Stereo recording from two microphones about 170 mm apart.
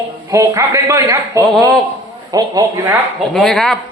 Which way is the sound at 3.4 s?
5° left (ahead or behind).